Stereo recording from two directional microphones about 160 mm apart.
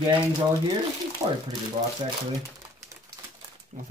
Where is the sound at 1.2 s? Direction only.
25° right (ahead or behind).